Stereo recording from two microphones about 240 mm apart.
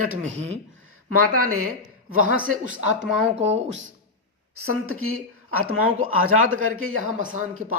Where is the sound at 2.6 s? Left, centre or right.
Right.